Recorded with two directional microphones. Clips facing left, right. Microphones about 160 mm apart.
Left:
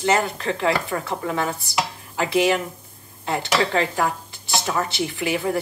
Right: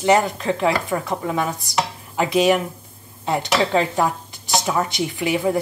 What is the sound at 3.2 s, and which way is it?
Speech, 20° right (ahead or behind).